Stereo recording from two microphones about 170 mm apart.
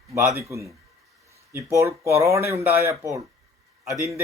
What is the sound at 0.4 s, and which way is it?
Speech, 20° right (ahead or behind).